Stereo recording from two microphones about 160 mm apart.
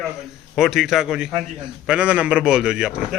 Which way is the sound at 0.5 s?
Centre (ahead or behind).